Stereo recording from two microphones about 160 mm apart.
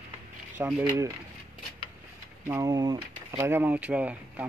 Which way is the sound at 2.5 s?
20° right (ahead or behind).